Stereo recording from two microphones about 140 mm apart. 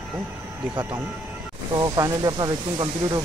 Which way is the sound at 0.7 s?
35° right (ahead or behind).